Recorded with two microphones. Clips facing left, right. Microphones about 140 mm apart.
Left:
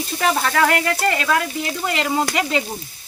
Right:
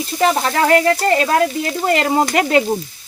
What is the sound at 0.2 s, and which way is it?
Speech, 30° right (ahead or behind).